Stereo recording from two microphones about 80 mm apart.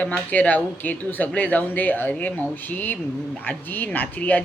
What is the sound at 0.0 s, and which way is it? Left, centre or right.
A woman's voice, centre.